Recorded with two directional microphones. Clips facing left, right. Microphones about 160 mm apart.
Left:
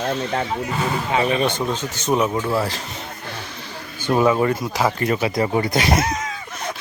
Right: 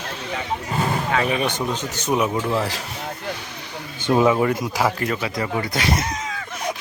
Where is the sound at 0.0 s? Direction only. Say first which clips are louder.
Left 7 dB; 55° left (ahead or behind).